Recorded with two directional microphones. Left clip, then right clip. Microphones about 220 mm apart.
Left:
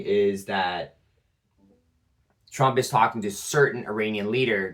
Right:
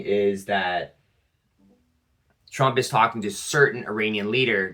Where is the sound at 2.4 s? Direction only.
15° right (ahead or behind).